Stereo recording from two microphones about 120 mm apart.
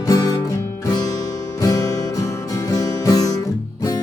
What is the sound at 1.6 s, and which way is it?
Music, 30° left (ahead or behind).